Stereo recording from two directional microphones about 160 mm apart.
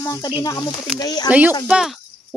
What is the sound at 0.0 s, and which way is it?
Speech, 20° left (ahead or behind).